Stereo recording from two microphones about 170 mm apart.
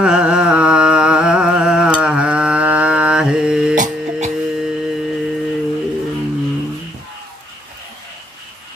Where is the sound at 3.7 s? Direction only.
50° right (ahead or behind).